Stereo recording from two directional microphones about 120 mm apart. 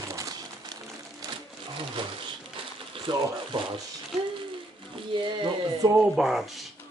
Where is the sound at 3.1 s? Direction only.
40° right (ahead or behind).